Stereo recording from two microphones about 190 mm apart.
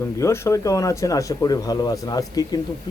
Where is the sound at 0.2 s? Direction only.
15° left (ahead or behind).